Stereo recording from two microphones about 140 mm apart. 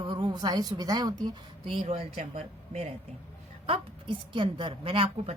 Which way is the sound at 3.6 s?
40° right (ahead or behind).